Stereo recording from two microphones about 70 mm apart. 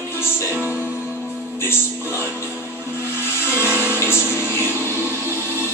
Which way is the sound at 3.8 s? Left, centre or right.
Left.